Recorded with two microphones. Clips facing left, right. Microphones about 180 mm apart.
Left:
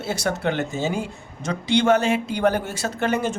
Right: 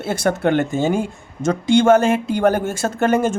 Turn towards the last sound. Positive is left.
turn(degrees=-50)  # may be behind; listen again after turning